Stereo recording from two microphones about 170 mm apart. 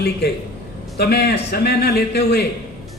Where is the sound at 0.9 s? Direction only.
75° left (ahead or behind).